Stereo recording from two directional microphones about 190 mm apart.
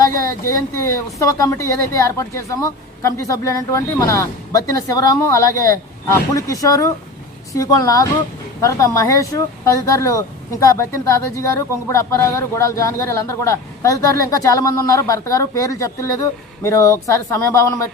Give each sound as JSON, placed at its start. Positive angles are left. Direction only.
{"t": 0.0, "sound": "speech", "side_deg": 15}